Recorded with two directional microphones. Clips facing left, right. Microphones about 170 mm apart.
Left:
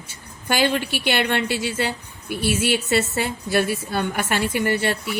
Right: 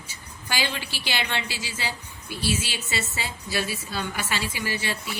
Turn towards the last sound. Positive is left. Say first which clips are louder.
# left 8 dB
turn(degrees=60)  # may be behind; listen again after turning